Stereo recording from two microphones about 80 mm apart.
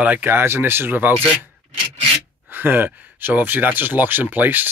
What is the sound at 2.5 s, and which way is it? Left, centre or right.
Speech, right.